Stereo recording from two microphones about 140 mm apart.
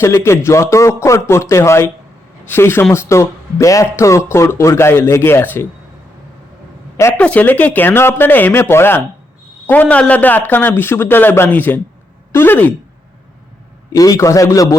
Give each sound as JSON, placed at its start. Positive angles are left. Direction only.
{"t": 0.0, "sound": "speech", "side_deg": 20}
{"t": 6.9, "sound": "a man's voice", "side_deg": 20}
{"t": 13.9, "sound": "speech", "side_deg": 25}